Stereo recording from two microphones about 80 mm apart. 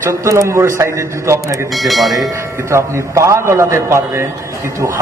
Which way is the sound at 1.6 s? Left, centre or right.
Centre.